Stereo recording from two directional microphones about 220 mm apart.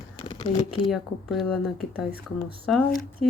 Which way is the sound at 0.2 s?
25° left (ahead or behind).